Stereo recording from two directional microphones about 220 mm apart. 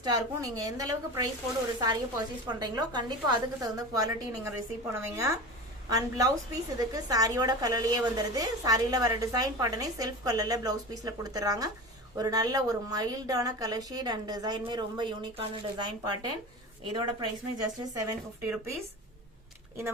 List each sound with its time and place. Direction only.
0.0 s a woman's voice: 15° right (ahead or behind)